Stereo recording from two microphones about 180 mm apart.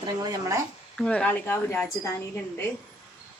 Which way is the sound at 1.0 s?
5° left (ahead or behind).